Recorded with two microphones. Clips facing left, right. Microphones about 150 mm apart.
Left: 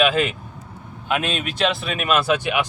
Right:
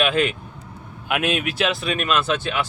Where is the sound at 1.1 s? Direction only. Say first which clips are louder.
Right 1 dB; 10° right (ahead or behind); by 2.6 s 15° left (ahead or behind).